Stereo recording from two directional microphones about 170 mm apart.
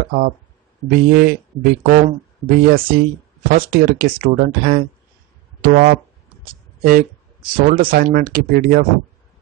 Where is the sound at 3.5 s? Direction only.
60° right (ahead or behind).